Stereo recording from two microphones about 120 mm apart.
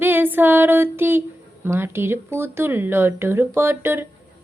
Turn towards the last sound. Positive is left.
turn(degrees=-20)  # may be behind; listen again after turning